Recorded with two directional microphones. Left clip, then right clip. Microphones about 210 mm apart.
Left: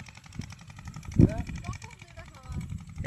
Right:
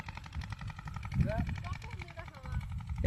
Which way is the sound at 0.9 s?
40° left (ahead or behind).